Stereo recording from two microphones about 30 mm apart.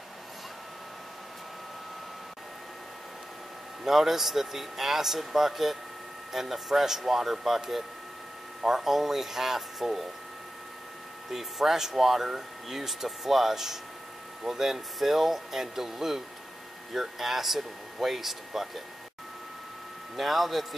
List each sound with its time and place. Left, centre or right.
3.8 s speech: centre
11.2 s speech: centre
20.2 s a man's voice: centre